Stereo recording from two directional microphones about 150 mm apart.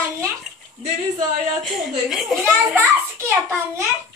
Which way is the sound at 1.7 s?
Centre (ahead or behind).